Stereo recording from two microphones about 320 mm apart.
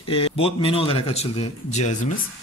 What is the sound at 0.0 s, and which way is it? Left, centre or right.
Speech, centre.